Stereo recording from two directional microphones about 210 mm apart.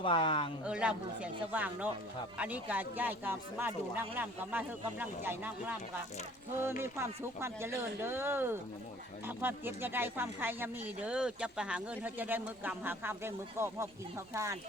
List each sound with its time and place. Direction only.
0.0 s speech: 25° left (ahead or behind)
0.6 s speech: 5° right (ahead or behind)